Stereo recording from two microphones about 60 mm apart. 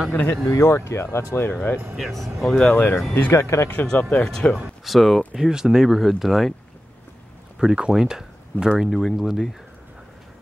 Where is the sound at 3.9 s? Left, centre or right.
Left.